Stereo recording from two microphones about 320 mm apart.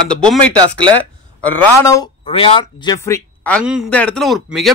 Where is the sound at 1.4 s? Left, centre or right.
Centre.